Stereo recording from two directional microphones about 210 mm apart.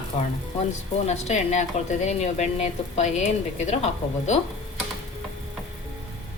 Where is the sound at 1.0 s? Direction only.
30° left (ahead or behind).